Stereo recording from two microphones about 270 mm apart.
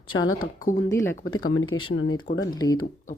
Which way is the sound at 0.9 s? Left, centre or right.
Centre.